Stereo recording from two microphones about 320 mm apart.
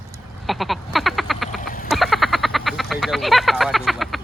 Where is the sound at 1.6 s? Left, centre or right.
Left.